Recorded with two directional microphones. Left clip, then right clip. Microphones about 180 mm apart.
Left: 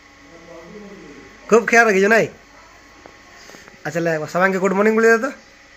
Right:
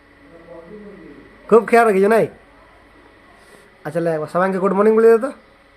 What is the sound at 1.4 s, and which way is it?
Speech, 10° right (ahead or behind).